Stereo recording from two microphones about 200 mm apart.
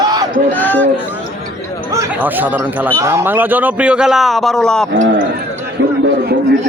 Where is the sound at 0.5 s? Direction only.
10° left (ahead or behind).